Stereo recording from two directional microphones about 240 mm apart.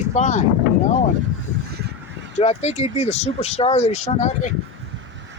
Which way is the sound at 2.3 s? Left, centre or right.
Left.